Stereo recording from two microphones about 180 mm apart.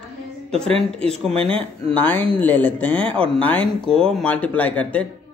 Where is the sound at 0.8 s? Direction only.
5° left (ahead or behind).